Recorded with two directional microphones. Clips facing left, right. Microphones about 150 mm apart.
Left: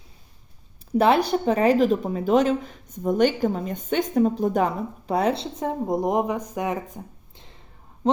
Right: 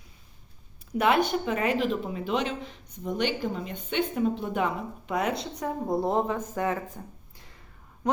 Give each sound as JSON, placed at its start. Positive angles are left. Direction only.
{"t": 0.9, "sound": "speech", "side_deg": 30}
{"t": 5.8, "sound": "speech", "side_deg": 15}
{"t": 8.0, "sound": "a sound", "side_deg": 30}